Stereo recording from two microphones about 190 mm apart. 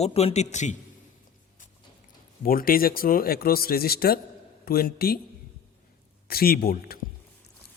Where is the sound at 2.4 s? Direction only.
50° left (ahead or behind).